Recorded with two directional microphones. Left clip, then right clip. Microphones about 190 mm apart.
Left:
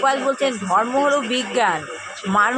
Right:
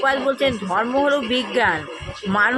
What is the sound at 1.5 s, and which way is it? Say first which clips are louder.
Speech: even; 40° right (ahead or behind).